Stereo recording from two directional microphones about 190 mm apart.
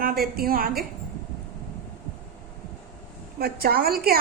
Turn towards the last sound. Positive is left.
turn(degrees=-50)  # may be behind; listen again after turning